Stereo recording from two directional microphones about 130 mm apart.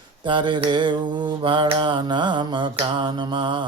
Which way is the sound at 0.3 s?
40° right (ahead or behind).